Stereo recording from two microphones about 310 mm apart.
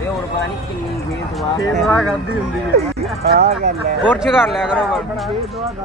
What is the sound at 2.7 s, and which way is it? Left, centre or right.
Speech, right.